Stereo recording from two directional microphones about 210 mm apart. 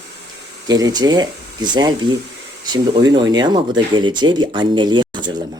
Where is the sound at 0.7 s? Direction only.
20° right (ahead or behind).